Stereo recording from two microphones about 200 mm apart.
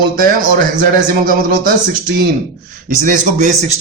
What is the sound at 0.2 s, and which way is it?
Speech, 45° right (ahead or behind).